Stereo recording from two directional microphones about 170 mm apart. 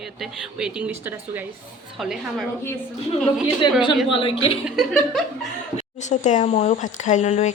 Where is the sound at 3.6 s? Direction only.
25° left (ahead or behind).